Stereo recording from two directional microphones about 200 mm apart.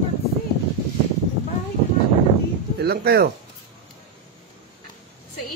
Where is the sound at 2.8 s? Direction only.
50° right (ahead or behind).